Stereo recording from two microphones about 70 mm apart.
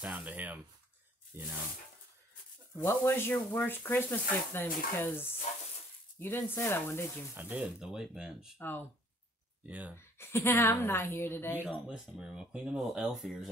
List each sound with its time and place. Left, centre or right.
0.0 s speech: centre
1.3 s speech: right
3.0 s speech: left
7.3 s speech: right
7.8 s speech: centre
8.5 s speech: left
9.7 s speech: right
9.9 s speech: left
11.6 s speech: centre